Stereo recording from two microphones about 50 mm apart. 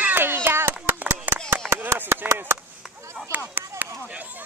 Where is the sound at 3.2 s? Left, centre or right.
Right.